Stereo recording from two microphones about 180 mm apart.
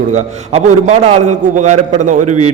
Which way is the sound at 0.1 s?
40° right (ahead or behind).